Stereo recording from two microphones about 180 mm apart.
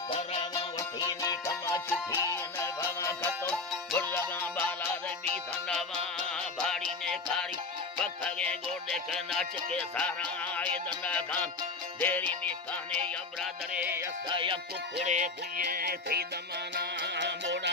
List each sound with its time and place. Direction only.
0.1 s music: 35° left (ahead or behind)
0.7 s music: 20° left (ahead or behind); by 6.8 s centre (ahead or behind)
8.0 s music: 5° left (ahead or behind)
13.7 s music: 10° right (ahead or behind)
14.3 s music: 30° right (ahead or behind)
15.0 s music: 45° right (ahead or behind)
16.7 s music: 75° right (ahead or behind)